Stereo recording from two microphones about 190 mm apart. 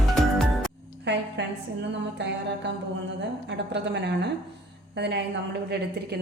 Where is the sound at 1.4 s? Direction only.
70° right (ahead or behind).